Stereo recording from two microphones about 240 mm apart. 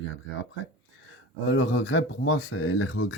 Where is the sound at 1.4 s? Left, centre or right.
Left.